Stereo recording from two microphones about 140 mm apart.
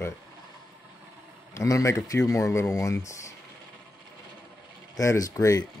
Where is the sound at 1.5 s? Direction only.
20° left (ahead or behind).